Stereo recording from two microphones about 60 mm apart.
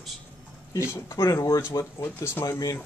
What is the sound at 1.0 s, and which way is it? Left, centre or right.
Speech, left.